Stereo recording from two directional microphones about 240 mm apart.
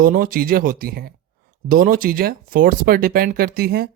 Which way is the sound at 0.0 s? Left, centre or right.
Right.